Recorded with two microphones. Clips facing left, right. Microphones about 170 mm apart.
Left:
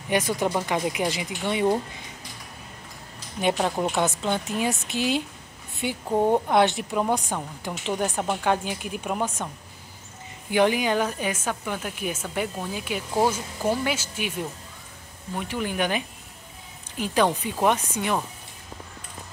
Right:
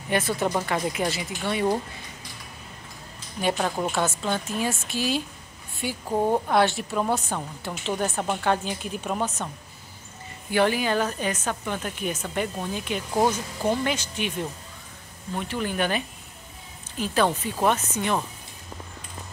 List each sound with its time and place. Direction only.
0.1 s a woman's voice: 15° left (ahead or behind)
3.5 s a woman's voice: 10° left (ahead or behind)
10.5 s a woman's voice: 15° left (ahead or behind)